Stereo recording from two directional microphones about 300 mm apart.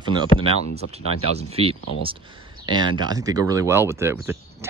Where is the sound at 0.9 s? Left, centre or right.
Centre.